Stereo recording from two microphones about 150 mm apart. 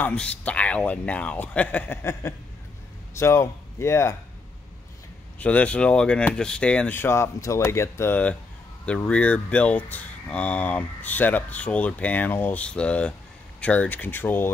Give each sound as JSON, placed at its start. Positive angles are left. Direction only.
{"t": 0.0, "sound": "speech", "side_deg": 5}
{"t": 5.4, "sound": "speech", "side_deg": 10}